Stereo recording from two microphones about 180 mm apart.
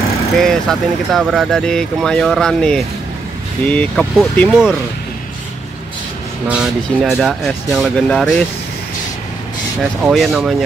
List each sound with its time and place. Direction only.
0.4 s speech: 5° left (ahead or behind)
6.4 s speech: 5° right (ahead or behind)
10.0 s speech: centre (ahead or behind)